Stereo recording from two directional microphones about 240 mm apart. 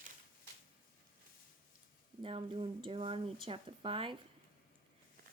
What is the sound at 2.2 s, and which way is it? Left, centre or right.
Speech, right.